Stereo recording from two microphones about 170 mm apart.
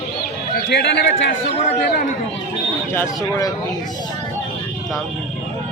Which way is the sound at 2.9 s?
15° left (ahead or behind).